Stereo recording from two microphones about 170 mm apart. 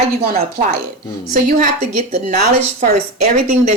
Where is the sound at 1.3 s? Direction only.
45° right (ahead or behind).